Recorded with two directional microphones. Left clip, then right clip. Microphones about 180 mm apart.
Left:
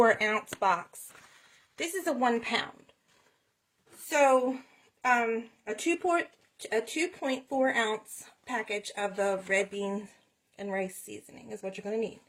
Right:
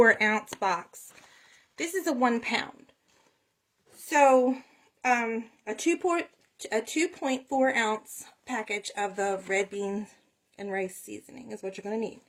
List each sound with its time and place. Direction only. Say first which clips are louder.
0.0 s speech: right 3 dB; 30° right (ahead or behind)
4.1 s speech: right 3 dB; 30° right (ahead or behind)